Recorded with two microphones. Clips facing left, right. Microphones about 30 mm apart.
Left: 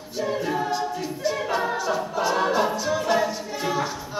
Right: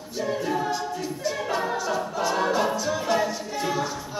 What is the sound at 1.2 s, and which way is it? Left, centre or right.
A capella, centre.